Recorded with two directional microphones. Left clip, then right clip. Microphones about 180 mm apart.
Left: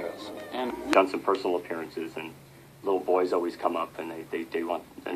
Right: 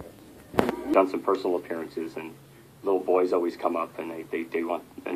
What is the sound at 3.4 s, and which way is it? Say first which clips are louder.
Speech: right 1 dB; 35° right (ahead or behind).